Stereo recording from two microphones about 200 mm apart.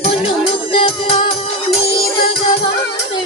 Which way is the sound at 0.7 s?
25° left (ahead or behind).